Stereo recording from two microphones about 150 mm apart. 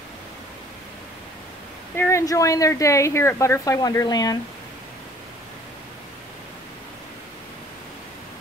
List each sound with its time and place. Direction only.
2.0 s a woman's voice: 20° left (ahead or behind)